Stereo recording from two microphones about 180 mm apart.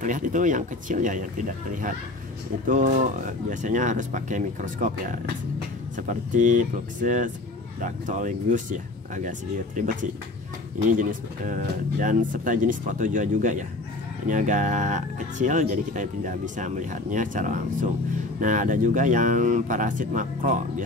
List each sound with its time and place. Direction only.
0.0 s speech: 45° right (ahead or behind)
11.0 s speech: 50° right (ahead or behind)